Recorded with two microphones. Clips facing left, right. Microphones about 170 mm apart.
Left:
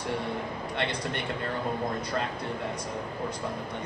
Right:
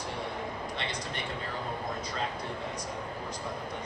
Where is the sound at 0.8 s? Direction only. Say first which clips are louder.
Left 5 dB; 60° left (ahead or behind).